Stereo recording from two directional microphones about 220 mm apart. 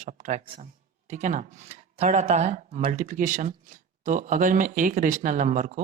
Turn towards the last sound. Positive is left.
turn(degrees=-35)  # may be behind; listen again after turning